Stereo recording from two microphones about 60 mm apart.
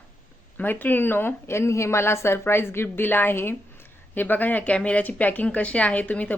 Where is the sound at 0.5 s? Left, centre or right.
Left.